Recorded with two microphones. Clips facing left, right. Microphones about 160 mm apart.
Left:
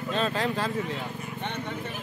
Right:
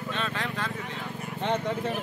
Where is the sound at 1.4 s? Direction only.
90° right.